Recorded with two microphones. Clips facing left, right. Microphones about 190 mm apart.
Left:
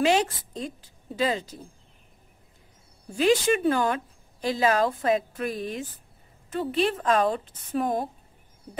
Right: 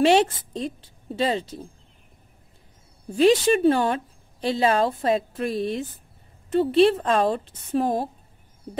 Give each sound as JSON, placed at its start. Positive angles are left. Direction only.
{"t": 1.1, "sound": "speech", "side_deg": -30}
{"t": 3.2, "sound": "speech", "side_deg": -30}